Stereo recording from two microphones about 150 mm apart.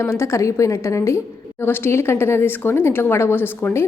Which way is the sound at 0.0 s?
15° left (ahead or behind).